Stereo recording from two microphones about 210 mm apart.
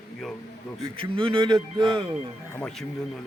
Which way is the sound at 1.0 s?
25° right (ahead or behind).